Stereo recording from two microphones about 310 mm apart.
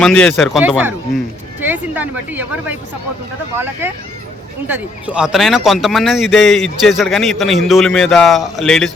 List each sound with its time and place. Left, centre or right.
0.0 s a man's voice: centre